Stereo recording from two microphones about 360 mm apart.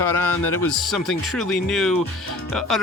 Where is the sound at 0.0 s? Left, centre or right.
Centre.